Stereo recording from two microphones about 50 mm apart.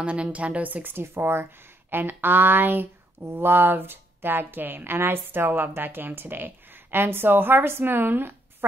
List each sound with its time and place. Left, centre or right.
0.0 s speech: right
0.8 s a woman's voice: right